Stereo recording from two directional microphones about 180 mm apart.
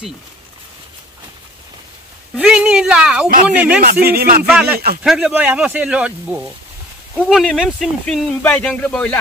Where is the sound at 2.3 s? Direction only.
5° right (ahead or behind).